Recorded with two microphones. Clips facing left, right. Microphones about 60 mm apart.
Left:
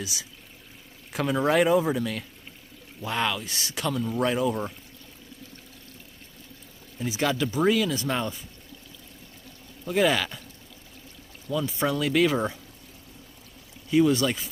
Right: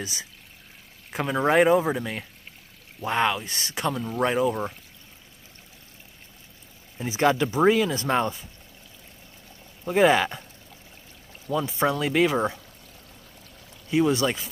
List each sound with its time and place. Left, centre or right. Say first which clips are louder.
0.0 s speech: right 1 dB; right
1.1 s speech: right 2 dB; right
7.0 s speech: right 4 dB; right
9.8 s speech: right 4 dB; right
11.4 s speech: right 2 dB; right
13.8 s speech: left 1 dB; right